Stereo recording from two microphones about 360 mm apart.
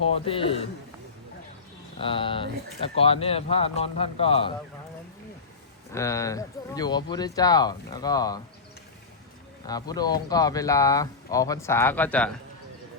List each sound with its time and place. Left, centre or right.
0.1 s speech: centre
2.0 s speech: centre
5.9 s speech: centre
9.6 s speech: centre